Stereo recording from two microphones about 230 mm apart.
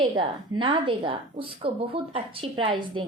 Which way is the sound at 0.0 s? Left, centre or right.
Right.